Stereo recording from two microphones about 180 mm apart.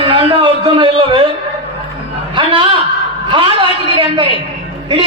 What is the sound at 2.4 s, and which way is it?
A man's voice, 30° right (ahead or behind).